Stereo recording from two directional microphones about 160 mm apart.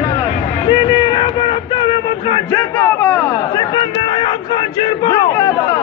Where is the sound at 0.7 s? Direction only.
30° left (ahead or behind).